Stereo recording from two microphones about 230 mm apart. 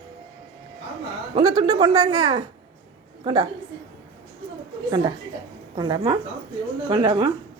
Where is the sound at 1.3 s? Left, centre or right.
Right.